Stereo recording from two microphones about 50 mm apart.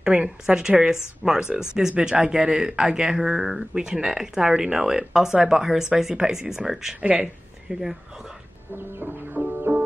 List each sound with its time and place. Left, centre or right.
0.0 s speech: centre
7.0 s speech: right
7.6 s speech: centre
8.7 s music: right